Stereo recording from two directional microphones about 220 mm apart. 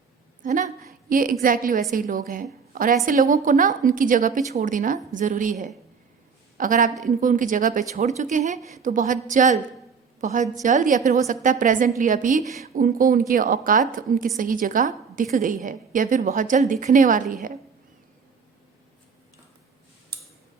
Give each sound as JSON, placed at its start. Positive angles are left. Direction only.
{"t": 0.4, "sound": "a woman's voice", "side_deg": -35}